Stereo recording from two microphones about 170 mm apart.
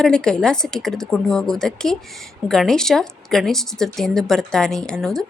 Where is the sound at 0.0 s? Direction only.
5° left (ahead or behind).